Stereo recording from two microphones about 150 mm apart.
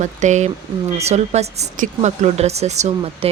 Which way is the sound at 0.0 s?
50° right (ahead or behind).